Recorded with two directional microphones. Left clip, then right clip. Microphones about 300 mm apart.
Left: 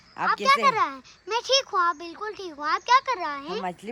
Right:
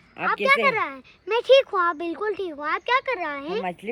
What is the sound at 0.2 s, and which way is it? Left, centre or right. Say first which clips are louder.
A child's voice: right 1 dB; centre.